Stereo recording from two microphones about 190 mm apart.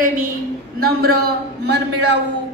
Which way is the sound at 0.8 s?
55° right (ahead or behind).